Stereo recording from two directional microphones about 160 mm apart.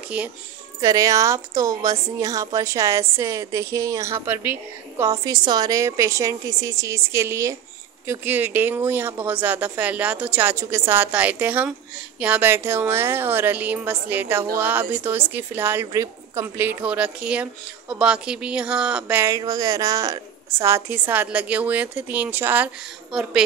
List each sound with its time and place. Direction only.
0.7 s a woman's voice: 20° right (ahead or behind)